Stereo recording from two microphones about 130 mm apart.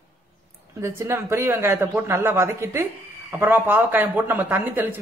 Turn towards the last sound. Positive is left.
turn(degrees=-15)  # may be behind; listen again after turning